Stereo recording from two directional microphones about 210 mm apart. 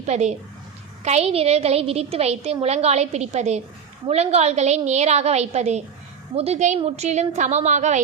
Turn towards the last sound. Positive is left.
turn(degrees=-35)  # may be behind; listen again after turning